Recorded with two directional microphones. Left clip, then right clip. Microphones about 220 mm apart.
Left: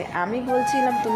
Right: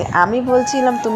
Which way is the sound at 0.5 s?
Centre (ahead or behind).